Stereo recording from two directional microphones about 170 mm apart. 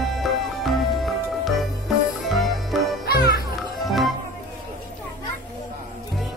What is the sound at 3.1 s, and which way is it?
Music, 65° left (ahead or behind).